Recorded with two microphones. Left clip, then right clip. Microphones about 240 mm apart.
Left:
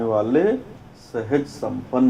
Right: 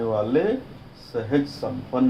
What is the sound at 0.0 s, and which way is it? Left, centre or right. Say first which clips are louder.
Speech: left 3 dB; left.